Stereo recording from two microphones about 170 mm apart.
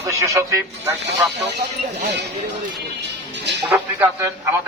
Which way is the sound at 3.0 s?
90° right.